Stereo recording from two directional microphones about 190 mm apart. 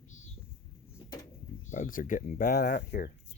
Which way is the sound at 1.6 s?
45° left (ahead or behind).